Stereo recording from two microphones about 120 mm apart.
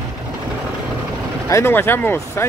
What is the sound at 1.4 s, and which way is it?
Speech, 20° left (ahead or behind).